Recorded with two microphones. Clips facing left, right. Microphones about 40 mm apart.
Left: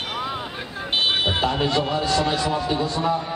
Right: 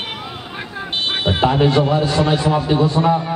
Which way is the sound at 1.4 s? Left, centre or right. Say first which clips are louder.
Right 7 dB; right.